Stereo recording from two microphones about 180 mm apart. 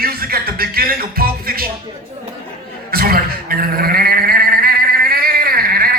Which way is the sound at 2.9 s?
55° right (ahead or behind).